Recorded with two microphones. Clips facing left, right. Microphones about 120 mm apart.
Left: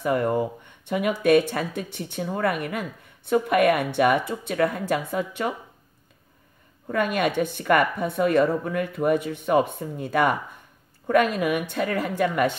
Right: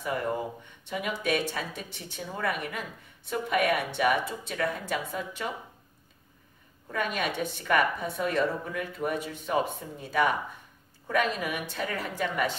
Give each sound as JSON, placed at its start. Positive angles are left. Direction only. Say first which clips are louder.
{"t": 0.0, "sound": "speech", "louder": "left 7 dB", "side_deg": 60}
{"t": 6.9, "sound": "speech", "louder": "left 7 dB", "side_deg": 60}